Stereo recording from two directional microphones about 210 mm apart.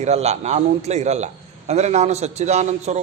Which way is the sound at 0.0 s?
30° right (ahead or behind).